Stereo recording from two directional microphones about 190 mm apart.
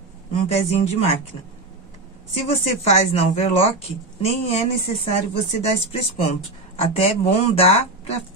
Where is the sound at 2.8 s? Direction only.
35° left (ahead or behind).